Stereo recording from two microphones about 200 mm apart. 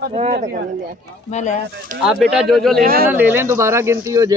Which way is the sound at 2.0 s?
Centre (ahead or behind).